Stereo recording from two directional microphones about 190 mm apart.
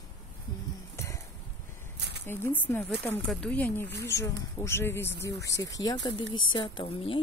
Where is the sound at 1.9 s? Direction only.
65° right (ahead or behind).